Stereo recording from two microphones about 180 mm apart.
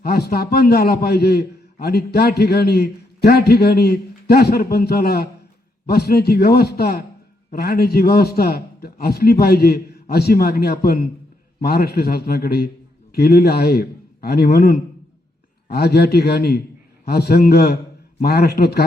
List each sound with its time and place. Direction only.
0.0 s a man's voice: 60° left (ahead or behind)